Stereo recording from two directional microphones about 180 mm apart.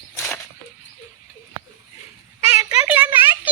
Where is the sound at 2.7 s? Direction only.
5° right (ahead or behind).